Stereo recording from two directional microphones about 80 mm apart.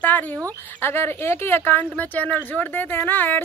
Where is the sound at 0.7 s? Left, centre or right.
Left.